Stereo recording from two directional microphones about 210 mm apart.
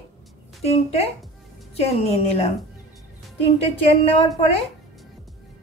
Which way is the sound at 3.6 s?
25° left (ahead or behind).